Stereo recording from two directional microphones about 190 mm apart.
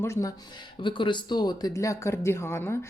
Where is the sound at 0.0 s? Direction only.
15° left (ahead or behind).